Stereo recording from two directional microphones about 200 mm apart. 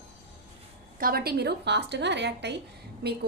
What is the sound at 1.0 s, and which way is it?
A woman's voice, 50° right (ahead or behind).